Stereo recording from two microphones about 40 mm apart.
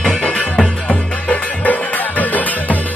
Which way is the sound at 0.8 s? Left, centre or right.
Left.